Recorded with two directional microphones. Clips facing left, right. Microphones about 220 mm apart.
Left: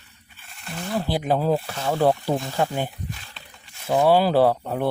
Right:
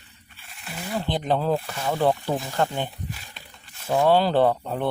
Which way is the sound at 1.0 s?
10° left (ahead or behind).